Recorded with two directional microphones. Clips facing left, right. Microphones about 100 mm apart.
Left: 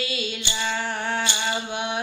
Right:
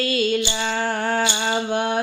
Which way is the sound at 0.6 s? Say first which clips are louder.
Right 4 dB; 45° right (ahead or behind).